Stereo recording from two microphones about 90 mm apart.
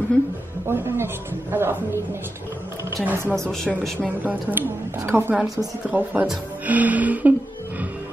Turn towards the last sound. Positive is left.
turn(degrees=-20)  # may be behind; listen again after turning